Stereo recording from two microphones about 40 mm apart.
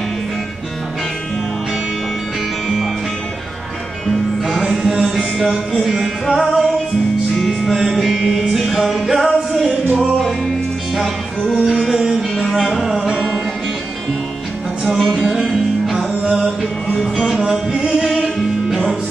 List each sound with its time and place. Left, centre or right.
4.5 s music: centre
11.6 s music: centre
12.2 s music: centre
12.8 s music: centre
14.9 s music: centre
15.3 s music: centre
15.9 s music: centre
18.0 s music: centre